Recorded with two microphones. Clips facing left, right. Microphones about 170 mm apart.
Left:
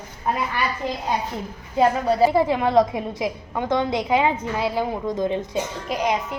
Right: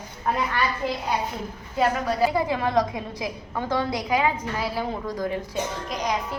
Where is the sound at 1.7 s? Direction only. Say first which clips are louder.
Left 5 dB; 25° left (ahead or behind).